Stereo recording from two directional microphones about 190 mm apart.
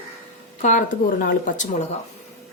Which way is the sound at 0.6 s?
40° left (ahead or behind).